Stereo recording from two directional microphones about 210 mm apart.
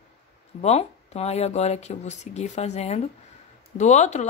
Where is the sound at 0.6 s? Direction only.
30° left (ahead or behind).